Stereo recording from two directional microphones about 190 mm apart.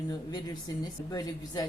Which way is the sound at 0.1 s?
20° left (ahead or behind).